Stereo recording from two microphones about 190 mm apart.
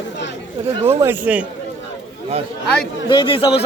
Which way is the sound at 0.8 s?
10° right (ahead or behind).